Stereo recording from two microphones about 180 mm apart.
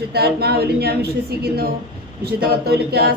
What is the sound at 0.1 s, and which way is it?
A woman's voice, 60° right (ahead or behind).